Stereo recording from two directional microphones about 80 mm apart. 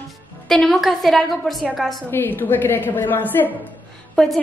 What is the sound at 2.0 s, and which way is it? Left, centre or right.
A woman's voice, left.